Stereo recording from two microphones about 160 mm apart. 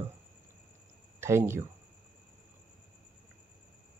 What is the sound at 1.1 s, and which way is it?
Speech, 15° right (ahead or behind).